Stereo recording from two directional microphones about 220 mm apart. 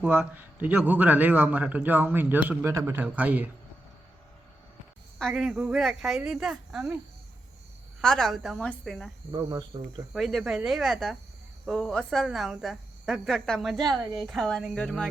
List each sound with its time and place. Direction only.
0.0 s a man's voice: 5° right (ahead or behind)
5.2 s speech: centre (ahead or behind)
8.0 s speech: centre (ahead or behind)
9.3 s a man's voice: 20° right (ahead or behind)
10.1 s speech: centre (ahead or behind)